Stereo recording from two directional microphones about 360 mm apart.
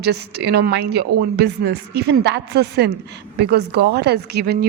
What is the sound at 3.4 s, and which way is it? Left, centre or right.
Speech, right.